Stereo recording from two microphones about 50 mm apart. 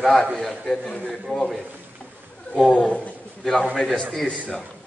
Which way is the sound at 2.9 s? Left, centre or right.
Left.